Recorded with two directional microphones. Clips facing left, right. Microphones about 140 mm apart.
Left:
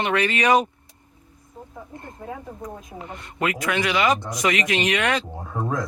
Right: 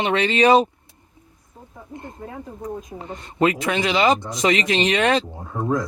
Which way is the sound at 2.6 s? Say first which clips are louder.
Right 4 dB; 30° right (ahead or behind).